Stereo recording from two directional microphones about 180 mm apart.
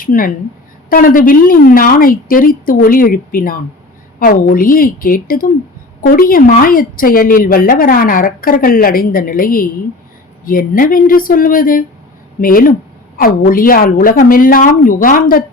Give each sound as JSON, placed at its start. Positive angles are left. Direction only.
{"t": 0.0, "sound": "a woman's voice", "side_deg": 50}